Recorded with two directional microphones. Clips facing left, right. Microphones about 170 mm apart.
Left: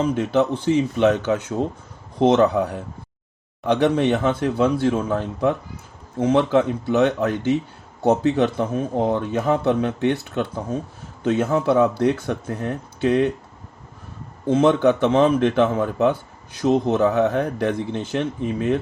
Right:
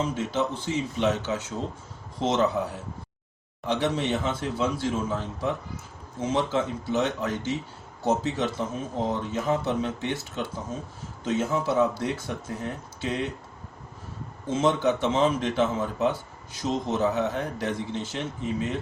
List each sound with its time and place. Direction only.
0.2 s speech: 60° left (ahead or behind)
14.4 s speech: 60° left (ahead or behind)